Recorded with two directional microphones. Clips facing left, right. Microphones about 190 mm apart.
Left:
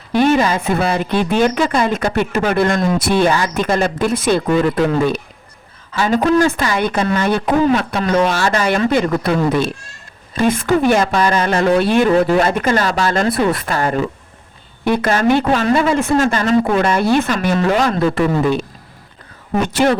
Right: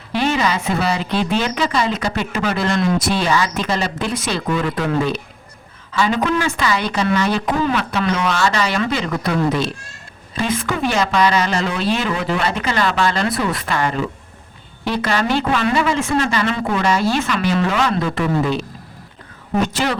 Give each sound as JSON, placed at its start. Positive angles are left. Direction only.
{"t": 0.1, "sound": "speech", "side_deg": 50}
{"t": 6.0, "sound": "speech", "side_deg": 40}
{"t": 13.7, "sound": "speech", "side_deg": 40}
{"t": 14.8, "sound": "speech", "side_deg": 50}
{"t": 16.1, "sound": "speech", "side_deg": 45}
{"t": 19.6, "sound": "speech", "side_deg": 50}